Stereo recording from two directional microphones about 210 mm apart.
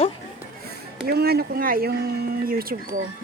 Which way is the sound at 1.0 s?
50° right (ahead or behind).